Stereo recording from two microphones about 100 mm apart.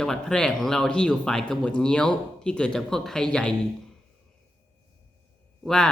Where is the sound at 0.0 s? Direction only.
5° left (ahead or behind).